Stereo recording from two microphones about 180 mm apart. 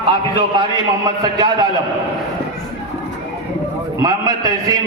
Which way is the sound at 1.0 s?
20° right (ahead or behind).